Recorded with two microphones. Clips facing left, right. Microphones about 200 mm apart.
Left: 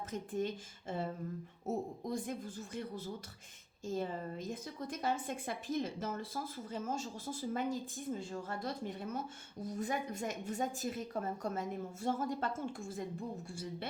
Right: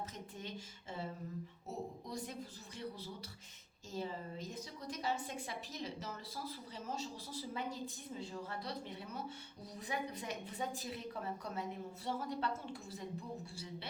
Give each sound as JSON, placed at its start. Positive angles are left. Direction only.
{"t": 0.1, "sound": "a woman's voice", "side_deg": 50}